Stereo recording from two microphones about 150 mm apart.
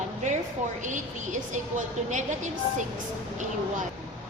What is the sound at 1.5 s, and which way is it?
A woman's voice, 55° right (ahead or behind).